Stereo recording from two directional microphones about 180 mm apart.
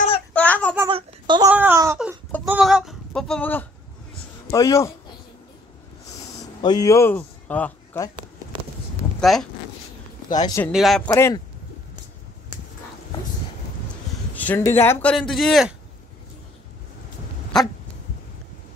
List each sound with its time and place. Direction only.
0.3 s child singing: 10° left (ahead or behind)
0.8 s a sound: 25° right (ahead or behind)
1.5 s speech: 10° right (ahead or behind)
2.4 s a sound: 5° right (ahead or behind)
4.5 s a man's voice: 20° left (ahead or behind)
6.6 s speech: 20° left (ahead or behind)
9.2 s speech: centre (ahead or behind)
10.3 s speech: 20° left (ahead or behind)
10.7 s speech: centre (ahead or behind)
11.1 s speech: 15° left (ahead or behind)
14.3 s a sound: 10° left (ahead or behind)
14.8 s speech: 10° left (ahead or behind)